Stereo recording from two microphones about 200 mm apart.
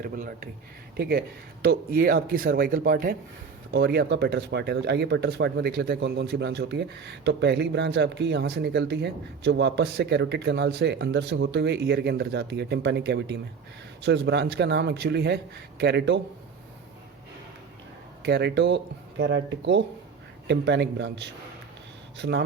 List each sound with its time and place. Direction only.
0.0 s speech: 45° right (ahead or behind); by 16.2 s 60° right (ahead or behind)
18.2 s speech: 55° right (ahead or behind)